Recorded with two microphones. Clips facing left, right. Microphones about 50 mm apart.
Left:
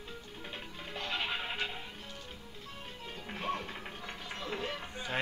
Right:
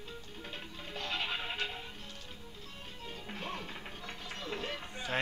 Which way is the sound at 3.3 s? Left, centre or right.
Centre.